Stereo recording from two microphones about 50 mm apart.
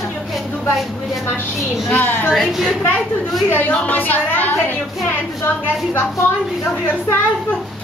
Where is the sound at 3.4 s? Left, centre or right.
Left.